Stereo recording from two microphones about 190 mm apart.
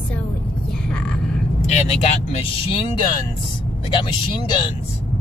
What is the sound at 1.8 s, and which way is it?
Speech, 30° left (ahead or behind).